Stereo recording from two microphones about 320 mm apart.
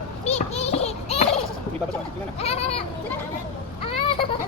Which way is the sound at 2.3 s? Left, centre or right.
Centre.